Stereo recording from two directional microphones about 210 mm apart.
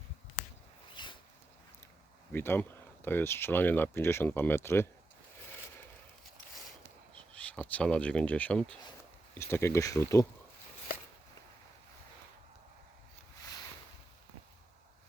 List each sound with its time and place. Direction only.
1.0 s zipper: 20° left (ahead or behind)
2.3 s speech: 10° left (ahead or behind)
7.1 s speech: 5° left (ahead or behind)